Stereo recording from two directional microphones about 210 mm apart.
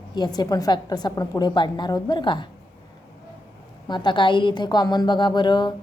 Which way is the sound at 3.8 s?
20° left (ahead or behind).